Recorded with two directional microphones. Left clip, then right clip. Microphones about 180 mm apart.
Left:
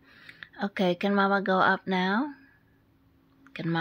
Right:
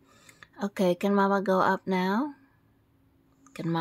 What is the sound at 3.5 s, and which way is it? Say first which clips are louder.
Speech: even; 20° right (ahead or behind).